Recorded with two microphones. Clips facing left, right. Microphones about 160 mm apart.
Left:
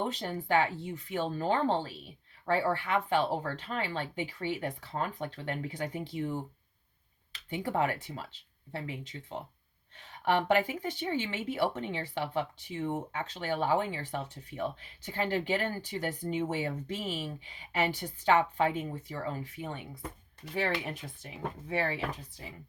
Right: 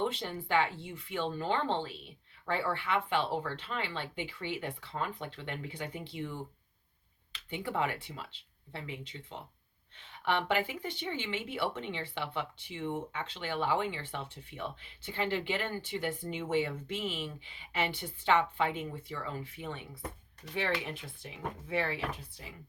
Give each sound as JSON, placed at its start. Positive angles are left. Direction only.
{"t": 0.0, "sound": "speech", "side_deg": 40}
{"t": 7.5, "sound": "speech", "side_deg": 45}